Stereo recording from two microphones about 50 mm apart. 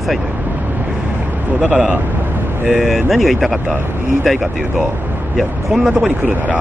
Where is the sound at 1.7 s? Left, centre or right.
Right.